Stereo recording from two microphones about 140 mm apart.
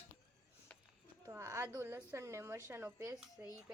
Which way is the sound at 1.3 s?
20° right (ahead or behind).